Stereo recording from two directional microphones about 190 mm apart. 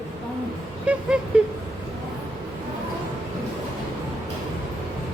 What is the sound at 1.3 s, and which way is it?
Speech, 5° right (ahead or behind).